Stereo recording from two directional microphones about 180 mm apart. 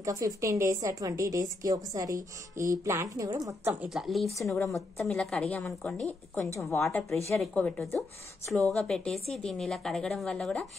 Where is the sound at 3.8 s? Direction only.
Centre (ahead or behind).